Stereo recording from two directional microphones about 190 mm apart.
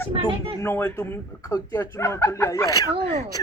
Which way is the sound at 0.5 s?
10° left (ahead or behind).